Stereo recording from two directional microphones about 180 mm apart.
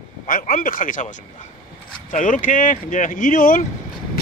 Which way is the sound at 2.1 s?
45° left (ahead or behind).